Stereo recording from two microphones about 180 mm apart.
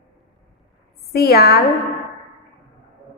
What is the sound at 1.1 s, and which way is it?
Speech, 60° left (ahead or behind).